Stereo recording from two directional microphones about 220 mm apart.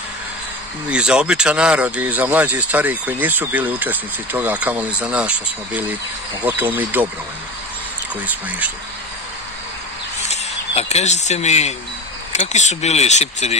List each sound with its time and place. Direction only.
0.8 s speech: 5° right (ahead or behind)
8.5 s speech: 5° right (ahead or behind)
10.2 s speech: 30° left (ahead or behind)